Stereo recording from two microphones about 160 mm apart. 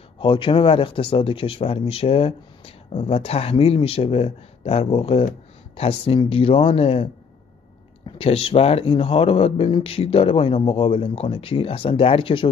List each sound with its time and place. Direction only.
0.2 s speech: 30° left (ahead or behind)